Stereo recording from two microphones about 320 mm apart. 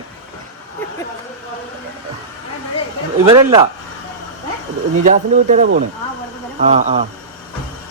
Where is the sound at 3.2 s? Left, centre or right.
Centre.